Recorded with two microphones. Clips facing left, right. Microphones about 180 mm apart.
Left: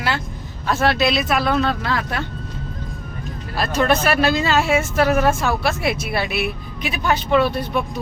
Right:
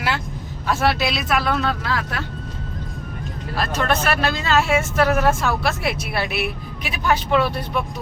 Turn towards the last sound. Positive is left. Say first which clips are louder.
# left 2 dB
turn(degrees=-5)  # may be behind; listen again after turning